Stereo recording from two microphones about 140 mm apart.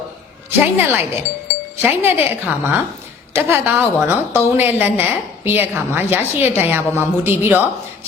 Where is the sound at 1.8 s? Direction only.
15° right (ahead or behind).